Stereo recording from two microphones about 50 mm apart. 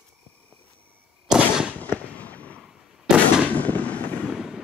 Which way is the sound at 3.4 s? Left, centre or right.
Left.